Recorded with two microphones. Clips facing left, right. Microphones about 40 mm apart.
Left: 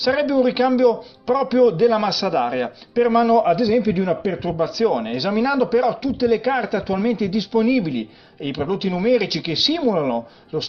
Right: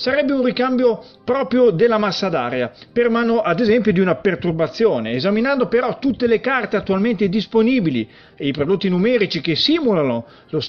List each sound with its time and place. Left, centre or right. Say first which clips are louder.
0.3 s a man's voice: even; right
1.2 s a man's voice: right 1 dB; right
3.4 s a man's voice: right 1 dB; right
3.7 s a man's voice: right 3 dB; right
4.4 s speech: right 3 dB; right